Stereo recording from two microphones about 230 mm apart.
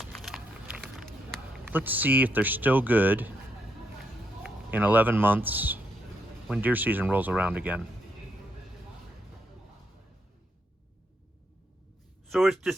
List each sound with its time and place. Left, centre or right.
0.0 s a sound: centre
1.6 s speech: centre
4.4 s speech: centre
12.3 s speech: centre